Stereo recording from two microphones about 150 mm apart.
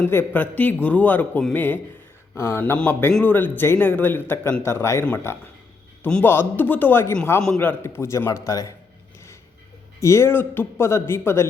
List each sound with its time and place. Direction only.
0.0 s speech: 15° left (ahead or behind)
10.0 s speech: 20° left (ahead or behind)